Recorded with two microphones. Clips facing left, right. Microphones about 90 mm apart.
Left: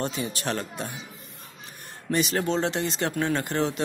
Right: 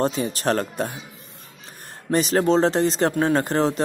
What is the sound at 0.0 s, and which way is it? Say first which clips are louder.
Speech: right 7 dB; 35° right (ahead or behind).